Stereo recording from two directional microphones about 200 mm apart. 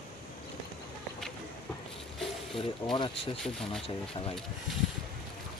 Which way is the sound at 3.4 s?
Centre (ahead or behind).